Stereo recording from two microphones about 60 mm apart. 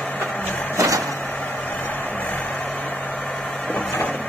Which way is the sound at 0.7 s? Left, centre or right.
Right.